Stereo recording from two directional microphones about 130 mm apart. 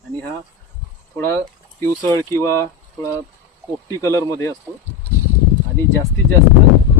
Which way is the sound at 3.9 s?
25° left (ahead or behind).